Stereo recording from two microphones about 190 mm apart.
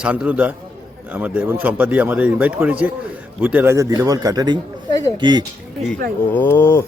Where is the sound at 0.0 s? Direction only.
5° right (ahead or behind); by 5.5 s 25° right (ahead or behind).